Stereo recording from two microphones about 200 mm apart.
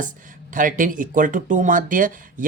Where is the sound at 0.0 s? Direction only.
40° right (ahead or behind).